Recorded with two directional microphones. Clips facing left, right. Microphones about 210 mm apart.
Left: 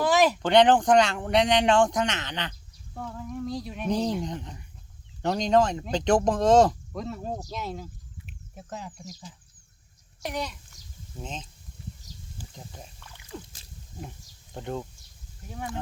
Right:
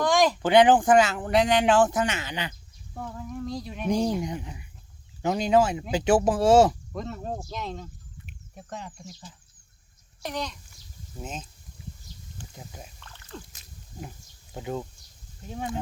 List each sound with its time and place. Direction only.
0.0 s a sound: 5° left (ahead or behind)
0.4 s speech: 5° right (ahead or behind)
3.8 s speech: 10° right (ahead or behind); by 7.9 s 5° left (ahead or behind)
8.3 s a sound: 5° left (ahead or behind)
10.2 s a child's voice: 10° left (ahead or behind)
11.2 s speech: 5° right (ahead or behind)
12.5 s speech: 5° right (ahead or behind)
13.0 s a sound: 10° left (ahead or behind)
14.5 s speech: 5° right (ahead or behind)
15.4 s speech: 25° right (ahead or behind)